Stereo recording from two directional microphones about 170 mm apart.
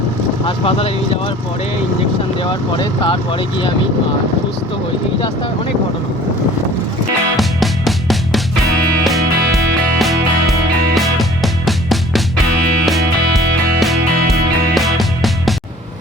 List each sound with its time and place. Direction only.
0.4 s speech: 35° left (ahead or behind)
2.4 s speech: 25° left (ahead or behind)
7.3 s music: centre (ahead or behind)
10.9 s music: centre (ahead or behind)
14.8 s music: centre (ahead or behind)